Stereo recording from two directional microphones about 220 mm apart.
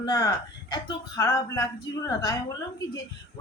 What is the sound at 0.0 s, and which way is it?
Speech, 20° left (ahead or behind).